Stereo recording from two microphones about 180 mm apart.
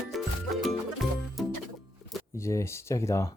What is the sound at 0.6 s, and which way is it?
Music, centre (ahead or behind).